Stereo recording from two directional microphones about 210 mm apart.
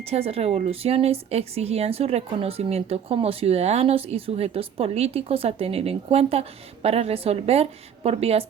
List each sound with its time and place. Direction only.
0.0 s speech: 30° right (ahead or behind)